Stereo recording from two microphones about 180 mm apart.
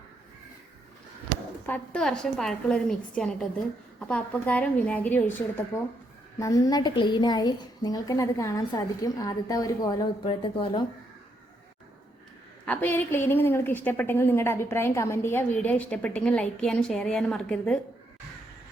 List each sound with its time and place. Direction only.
1.6 s a woman's voice: 10° left (ahead or behind); by 10.8 s 30° left (ahead or behind)
12.6 s a woman's voice: 10° left (ahead or behind)